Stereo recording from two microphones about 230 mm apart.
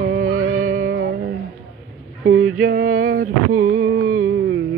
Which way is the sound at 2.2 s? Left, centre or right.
Right.